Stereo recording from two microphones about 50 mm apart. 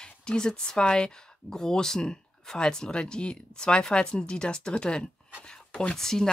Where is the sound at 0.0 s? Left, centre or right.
Centre.